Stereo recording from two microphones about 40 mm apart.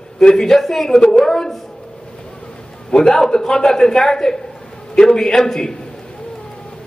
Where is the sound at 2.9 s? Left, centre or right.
Centre.